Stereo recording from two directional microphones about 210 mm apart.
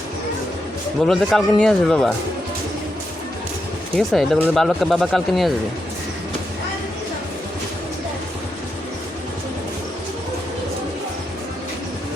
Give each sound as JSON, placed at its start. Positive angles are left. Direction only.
{"t": 1.0, "sound": "speech", "side_deg": 0}
{"t": 3.9, "sound": "speech", "side_deg": 0}